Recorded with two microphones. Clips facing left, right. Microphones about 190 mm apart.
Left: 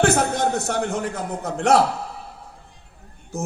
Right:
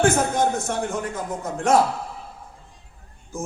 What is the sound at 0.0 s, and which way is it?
A man's voice, 75° left (ahead or behind).